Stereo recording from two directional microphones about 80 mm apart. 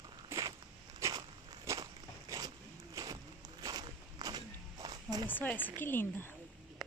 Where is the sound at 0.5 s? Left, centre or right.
Right.